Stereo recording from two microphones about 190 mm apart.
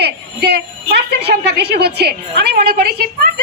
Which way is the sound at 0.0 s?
60° right (ahead or behind).